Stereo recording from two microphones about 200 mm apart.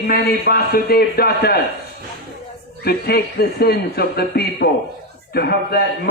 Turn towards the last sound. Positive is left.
turn(degrees=50)  # may be behind; listen again after turning